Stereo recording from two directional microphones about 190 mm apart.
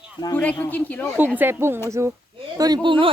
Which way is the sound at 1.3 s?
10° right (ahead or behind).